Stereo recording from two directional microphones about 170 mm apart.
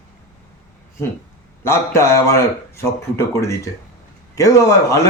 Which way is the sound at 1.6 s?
15° left (ahead or behind).